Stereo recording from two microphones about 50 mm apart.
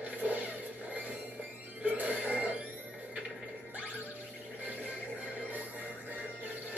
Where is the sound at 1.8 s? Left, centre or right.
Right.